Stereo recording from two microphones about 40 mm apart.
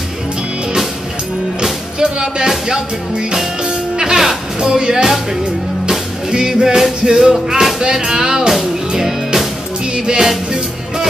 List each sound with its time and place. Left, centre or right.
1.6 s music: centre